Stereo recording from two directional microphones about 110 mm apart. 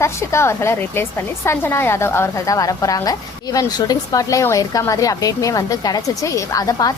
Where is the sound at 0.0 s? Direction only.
25° left (ahead or behind).